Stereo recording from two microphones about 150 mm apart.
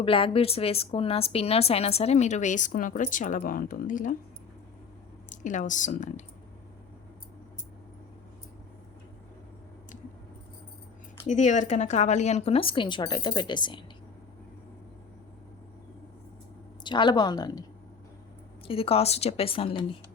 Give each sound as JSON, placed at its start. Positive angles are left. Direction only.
{"t": 0.0, "sound": "a woman's voice", "side_deg": 35}
{"t": 5.3, "sound": "speech", "side_deg": 55}
{"t": 11.3, "sound": "speech", "side_deg": 55}
{"t": 16.8, "sound": "speech", "side_deg": 30}
{"t": 18.7, "sound": "speech", "side_deg": 40}